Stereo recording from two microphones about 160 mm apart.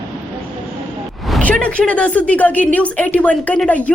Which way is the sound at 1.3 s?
5° left (ahead or behind).